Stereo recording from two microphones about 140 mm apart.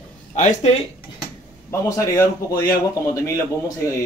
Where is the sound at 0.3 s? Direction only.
55° left (ahead or behind).